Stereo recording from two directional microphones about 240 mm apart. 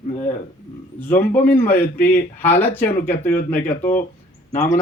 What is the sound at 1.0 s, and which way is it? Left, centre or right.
A man's voice, centre.